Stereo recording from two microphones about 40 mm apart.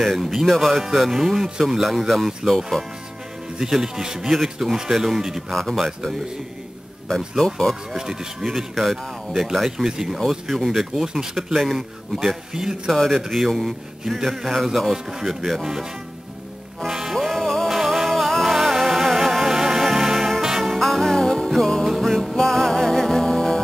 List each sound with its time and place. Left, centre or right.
0.0 s speech: centre
2.7 s speech: centre
3.7 s speech: centre
4.3 s speech: centre
5.5 s speech: centre
7.5 s speech: centre
8.0 s speech: centre
8.5 s speech: centre
9.7 s speech: centre
12.9 s speech: centre
16.8 s music: centre
17.6 s music: centre